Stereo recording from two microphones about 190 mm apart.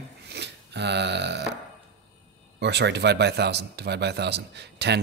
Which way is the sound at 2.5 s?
65° right (ahead or behind).